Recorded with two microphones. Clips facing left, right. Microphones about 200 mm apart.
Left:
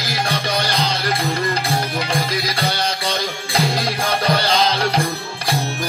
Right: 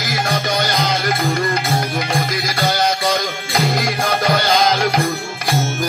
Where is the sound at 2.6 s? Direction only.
30° left (ahead or behind).